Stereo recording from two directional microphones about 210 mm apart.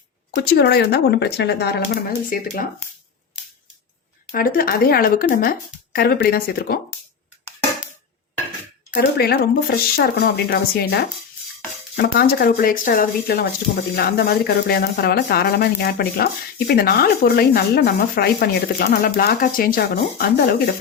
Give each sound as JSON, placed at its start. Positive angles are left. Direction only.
{"t": 0.3, "sound": "speech", "side_deg": 50}
{"t": 4.3, "sound": "speech", "side_deg": 45}
{"t": 8.9, "sound": "speech", "side_deg": 45}